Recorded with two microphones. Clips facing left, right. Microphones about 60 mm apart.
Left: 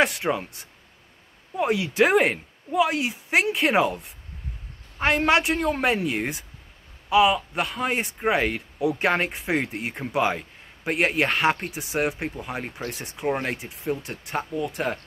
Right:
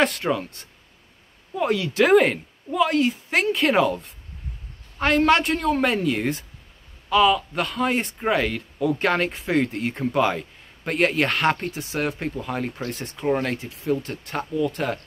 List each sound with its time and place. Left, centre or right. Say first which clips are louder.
0.0 s speech: right 1 dB; centre